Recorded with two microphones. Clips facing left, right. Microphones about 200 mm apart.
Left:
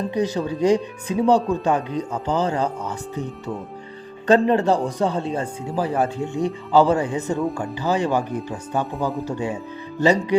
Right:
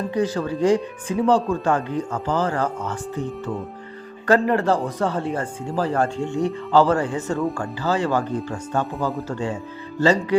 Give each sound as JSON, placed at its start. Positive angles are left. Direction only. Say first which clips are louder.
{"t": 0.1, "sound": "speech", "louder": "even", "side_deg": 20}
{"t": 5.7, "sound": "speech", "louder": "even", "side_deg": 10}